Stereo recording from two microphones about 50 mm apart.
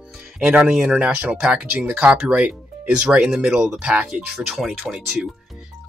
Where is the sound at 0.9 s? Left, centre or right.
Right.